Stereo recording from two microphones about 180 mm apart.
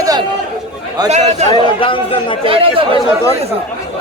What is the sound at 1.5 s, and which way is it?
Speech, 30° left (ahead or behind).